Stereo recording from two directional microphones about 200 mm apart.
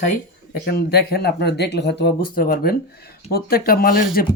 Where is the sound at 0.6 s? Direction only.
50° left (ahead or behind).